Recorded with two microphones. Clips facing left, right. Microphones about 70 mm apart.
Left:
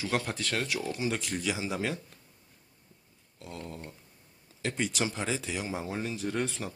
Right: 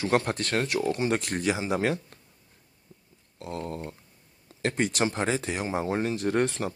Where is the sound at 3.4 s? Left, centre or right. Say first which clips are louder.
Right 7 dB; right.